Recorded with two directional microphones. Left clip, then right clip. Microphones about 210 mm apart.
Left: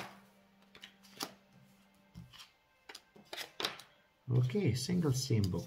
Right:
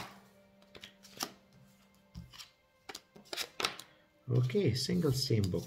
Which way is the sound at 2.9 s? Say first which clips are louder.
Right 4 dB; 35° right (ahead or behind).